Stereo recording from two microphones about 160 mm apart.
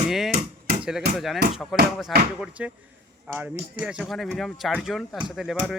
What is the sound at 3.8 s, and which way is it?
Speech, 5° right (ahead or behind).